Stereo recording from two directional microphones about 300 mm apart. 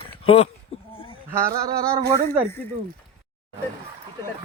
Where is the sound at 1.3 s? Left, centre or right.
Centre.